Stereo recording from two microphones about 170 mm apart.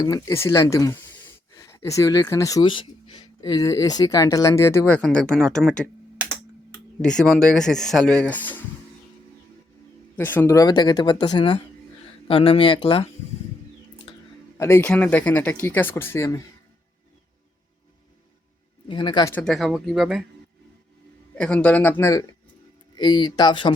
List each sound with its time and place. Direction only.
0.0 s speech: 20° left (ahead or behind); by 5.9 s 5° left (ahead or behind)
6.2 s computer keyboard: 10° right (ahead or behind)
7.0 s speech: 5° left (ahead or behind)
10.2 s speech: 15° left (ahead or behind); by 13.1 s 30° left (ahead or behind)
14.1 s a sound: 30° left (ahead or behind)
14.6 s speech: 15° left (ahead or behind)
18.9 s speech: 30° left (ahead or behind)
19.3 s speech: 10° left (ahead or behind)
19.5 s speech: centre (ahead or behind)
21.3 s speech: 5° left (ahead or behind); by 23.7 s 30° left (ahead or behind)